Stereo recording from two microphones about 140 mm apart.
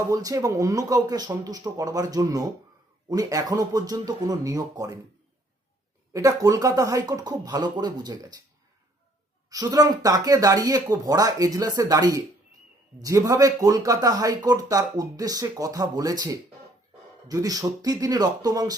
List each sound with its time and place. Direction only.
0.1 s speech: 25° right (ahead or behind)
6.1 s speech: 25° right (ahead or behind)
9.5 s speech: 25° right (ahead or behind)